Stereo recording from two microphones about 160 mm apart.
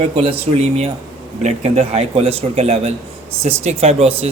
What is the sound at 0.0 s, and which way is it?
Speech, 40° right (ahead or behind).